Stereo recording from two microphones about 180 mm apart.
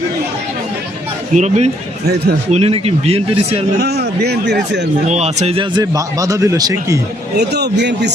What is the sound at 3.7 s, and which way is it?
Speech, 65° right (ahead or behind).